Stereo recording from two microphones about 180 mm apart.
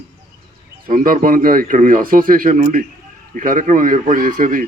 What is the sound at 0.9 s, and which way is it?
A man's voice, 50° right (ahead or behind).